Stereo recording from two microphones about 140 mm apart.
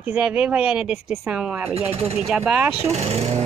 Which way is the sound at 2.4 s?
15° right (ahead or behind).